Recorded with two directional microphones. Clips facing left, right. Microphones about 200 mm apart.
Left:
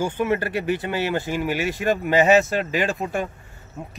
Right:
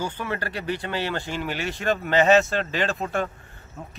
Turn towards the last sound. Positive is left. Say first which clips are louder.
# left 2 dB
turn(degrees=15)  # may be behind; listen again after turning